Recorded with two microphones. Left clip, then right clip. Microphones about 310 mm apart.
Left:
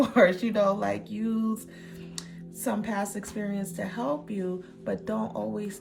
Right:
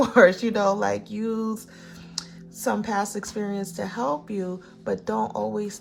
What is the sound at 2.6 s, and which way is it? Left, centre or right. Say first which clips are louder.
Speech: right 5 dB; centre.